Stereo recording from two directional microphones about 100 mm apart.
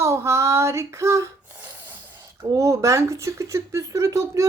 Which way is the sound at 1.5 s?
20° right (ahead or behind).